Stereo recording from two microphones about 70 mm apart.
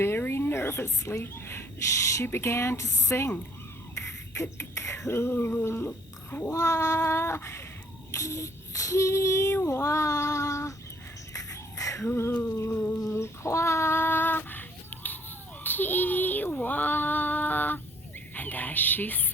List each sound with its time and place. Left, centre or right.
0.0 s a woman's voice: left
5.6 s cat: left
6.5 s cat: left
8.1 s child singing: left
11.3 s music: left
12.0 s cat: left
12.3 s a sound: centre
12.5 s cat: left
13.1 s child singing: left
15.6 s speech: left
18.3 s a sound: left